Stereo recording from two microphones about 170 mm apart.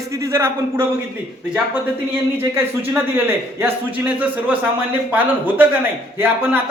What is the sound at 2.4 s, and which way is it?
A man's voice, 15° right (ahead or behind).